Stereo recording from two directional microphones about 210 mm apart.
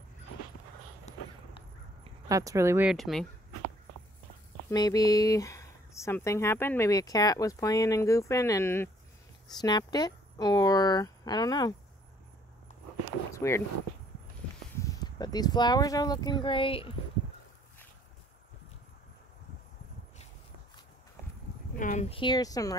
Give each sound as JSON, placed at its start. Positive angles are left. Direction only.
{"t": 1.1, "sound": "walk", "side_deg": 30}
{"t": 2.0, "sound": "speech", "side_deg": -15}
{"t": 2.9, "sound": "speech", "side_deg": 0}
{"t": 4.6, "sound": "speech", "side_deg": 15}
{"t": 13.0, "sound": "a sound", "side_deg": 15}
{"t": 14.8, "sound": "speech", "side_deg": 20}
{"t": 21.7, "sound": "speech", "side_deg": 40}
{"t": 22.1, "sound": "speech", "side_deg": 20}